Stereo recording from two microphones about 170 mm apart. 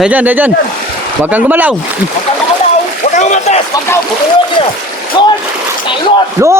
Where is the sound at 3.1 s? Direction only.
45° left (ahead or behind).